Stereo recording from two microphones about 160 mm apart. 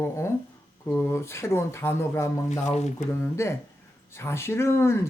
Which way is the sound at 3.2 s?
15° left (ahead or behind).